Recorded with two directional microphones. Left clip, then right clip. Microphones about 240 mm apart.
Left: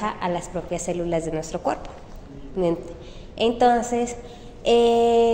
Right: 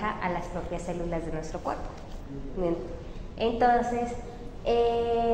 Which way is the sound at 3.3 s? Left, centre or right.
Left.